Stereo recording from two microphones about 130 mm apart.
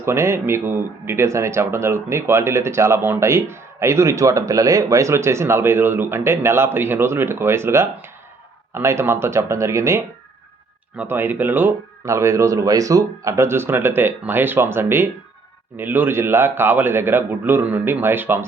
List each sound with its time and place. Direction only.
0.0 s speech: 20° right (ahead or behind)